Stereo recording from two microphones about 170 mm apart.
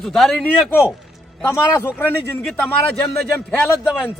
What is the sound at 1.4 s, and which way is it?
A man's voice, 15° left (ahead or behind).